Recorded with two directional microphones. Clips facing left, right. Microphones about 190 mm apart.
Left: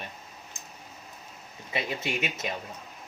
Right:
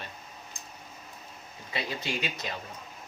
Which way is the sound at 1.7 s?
20° left (ahead or behind).